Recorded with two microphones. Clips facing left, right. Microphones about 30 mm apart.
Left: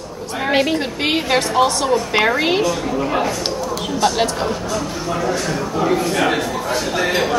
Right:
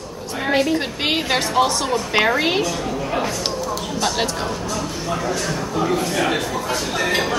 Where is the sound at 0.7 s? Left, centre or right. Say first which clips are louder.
Left 2 dB; centre.